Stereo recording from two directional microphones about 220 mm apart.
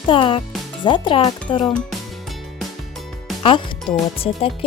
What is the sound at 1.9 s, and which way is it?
Music, centre (ahead or behind).